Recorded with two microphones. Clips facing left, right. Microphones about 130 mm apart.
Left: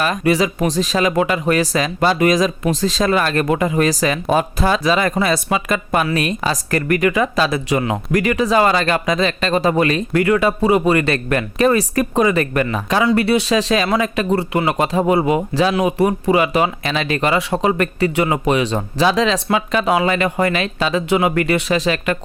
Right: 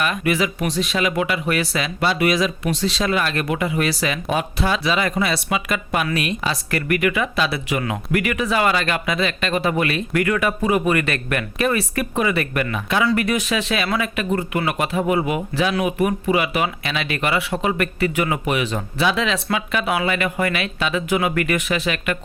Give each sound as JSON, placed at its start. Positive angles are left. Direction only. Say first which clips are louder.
{"t": 0.0, "sound": "speech", "louder": "left 4 dB", "side_deg": 35}